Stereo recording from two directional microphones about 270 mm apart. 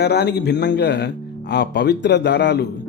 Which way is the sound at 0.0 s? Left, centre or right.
Left.